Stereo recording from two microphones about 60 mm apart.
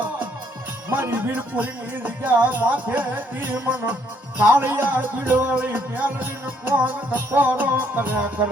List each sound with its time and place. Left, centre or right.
0.9 s music: right